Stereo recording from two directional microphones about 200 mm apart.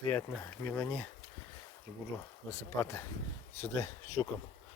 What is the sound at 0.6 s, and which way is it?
Speech, 10° left (ahead or behind).